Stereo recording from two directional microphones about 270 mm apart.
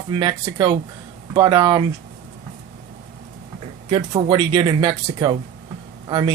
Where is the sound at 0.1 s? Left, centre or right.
Centre.